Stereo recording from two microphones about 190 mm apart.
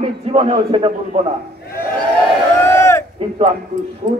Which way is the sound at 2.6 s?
15° left (ahead or behind).